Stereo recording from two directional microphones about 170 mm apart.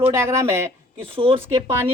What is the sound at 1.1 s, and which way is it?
Speech, 30° right (ahead or behind).